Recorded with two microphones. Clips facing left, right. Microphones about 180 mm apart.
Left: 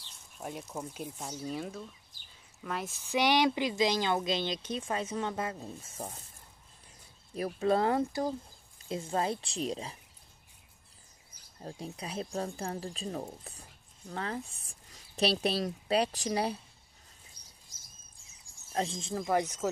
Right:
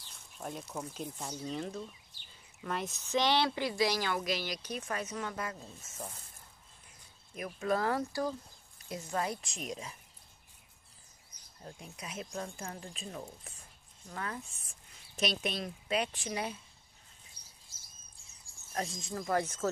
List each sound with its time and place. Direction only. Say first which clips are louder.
0.4 s speech: left 1 dB; 5° left (ahead or behind); by 5.9 s 30° left (ahead or behind)
7.3 s speech: left 5 dB; 35° left (ahead or behind)
11.8 s speech: left 6 dB; 30° left (ahead or behind)
18.7 s speech: left 4 dB; 25° left (ahead or behind)